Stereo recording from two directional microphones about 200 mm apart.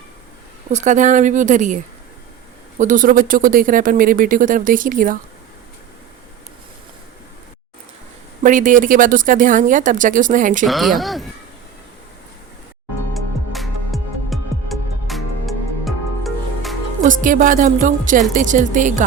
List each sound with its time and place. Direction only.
0.7 s speech: 35° right (ahead or behind)
8.4 s speech: 40° right (ahead or behind)
10.7 s speech: centre (ahead or behind)
13.1 s music: centre (ahead or behind)
17.0 s speech: 40° right (ahead or behind)